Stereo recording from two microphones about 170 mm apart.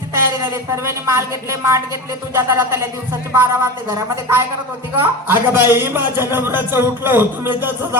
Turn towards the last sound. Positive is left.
turn(degrees=-15)  # may be behind; listen again after turning